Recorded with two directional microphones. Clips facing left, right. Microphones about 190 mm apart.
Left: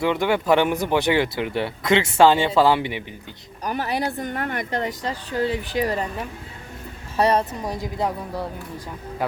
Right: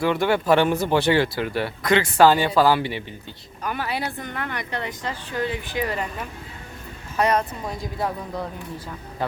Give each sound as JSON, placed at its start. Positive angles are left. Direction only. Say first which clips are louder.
{"t": 0.0, "sound": "speech", "louder": "even", "side_deg": 20}
{"t": 3.6, "sound": "a woman's voice", "louder": "left 3 dB", "side_deg": 40}
{"t": 7.6, "sound": "speech", "louder": "left 2 dB", "side_deg": 20}